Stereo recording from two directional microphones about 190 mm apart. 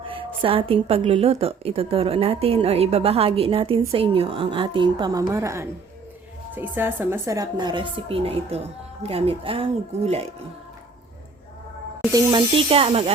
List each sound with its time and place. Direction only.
0.0 s a woman's voice: 30° right (ahead or behind)
12.1 s a woman's voice: 25° right (ahead or behind)